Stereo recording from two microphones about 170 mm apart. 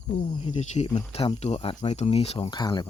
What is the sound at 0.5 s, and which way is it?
Speech, 45° left (ahead or behind).